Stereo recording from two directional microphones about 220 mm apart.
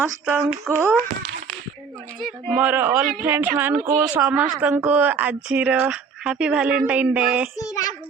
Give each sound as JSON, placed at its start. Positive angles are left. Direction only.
{"t": 0.0, "sound": "speech", "side_deg": -10}
{"t": 2.2, "sound": "speech", "side_deg": -5}
{"t": 4.2, "sound": "a woman's voice", "side_deg": -5}
{"t": 7.5, "sound": "child singing", "side_deg": 15}